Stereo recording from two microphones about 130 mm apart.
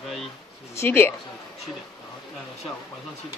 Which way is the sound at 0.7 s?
15° left (ahead or behind).